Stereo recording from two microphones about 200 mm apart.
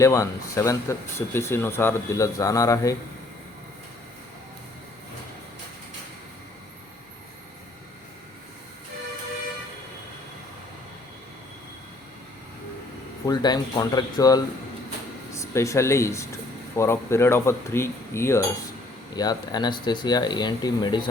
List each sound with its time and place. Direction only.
0.0 s speech: 15° left (ahead or behind)
13.2 s speech: 20° left (ahead or behind)